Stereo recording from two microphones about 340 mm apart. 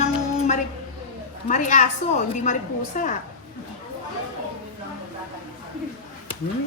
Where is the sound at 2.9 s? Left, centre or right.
Left.